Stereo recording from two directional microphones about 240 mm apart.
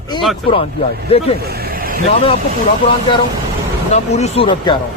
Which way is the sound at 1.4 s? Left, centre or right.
Right.